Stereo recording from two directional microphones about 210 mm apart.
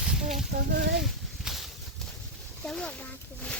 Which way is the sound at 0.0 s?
5° right (ahead or behind).